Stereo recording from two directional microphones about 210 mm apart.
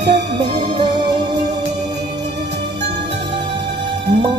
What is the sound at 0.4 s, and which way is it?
Music, 20° right (ahead or behind).